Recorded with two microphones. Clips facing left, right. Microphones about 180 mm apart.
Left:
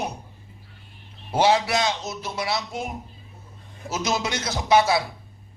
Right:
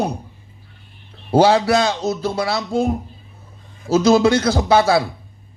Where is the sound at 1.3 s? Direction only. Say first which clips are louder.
Right 7 dB; 30° right (ahead or behind).